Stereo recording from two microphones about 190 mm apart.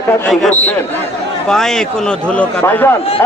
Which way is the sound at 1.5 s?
5° left (ahead or behind).